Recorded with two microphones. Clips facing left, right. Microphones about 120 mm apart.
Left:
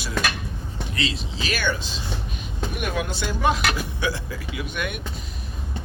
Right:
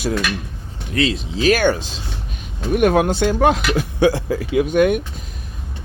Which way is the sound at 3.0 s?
60° right (ahead or behind).